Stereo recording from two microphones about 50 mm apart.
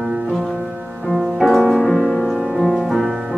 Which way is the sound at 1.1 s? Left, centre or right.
Centre.